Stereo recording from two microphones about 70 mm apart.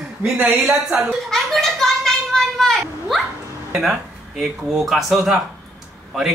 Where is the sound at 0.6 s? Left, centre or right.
Centre.